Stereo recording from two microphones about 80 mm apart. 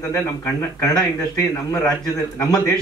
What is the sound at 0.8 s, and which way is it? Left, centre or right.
A man's voice, left.